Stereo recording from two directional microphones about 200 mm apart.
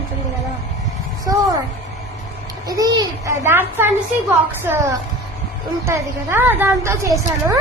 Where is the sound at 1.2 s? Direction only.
20° right (ahead or behind).